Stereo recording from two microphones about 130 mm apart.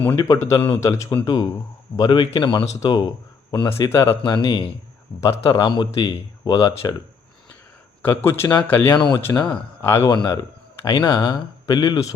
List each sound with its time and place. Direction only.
0.0 s speech: 20° left (ahead or behind)
3.7 s speech: 20° left (ahead or behind)
4.3 s speech: 35° left (ahead or behind)
8.0 s speech: 15° left (ahead or behind)
10.1 s speech: 30° left (ahead or behind)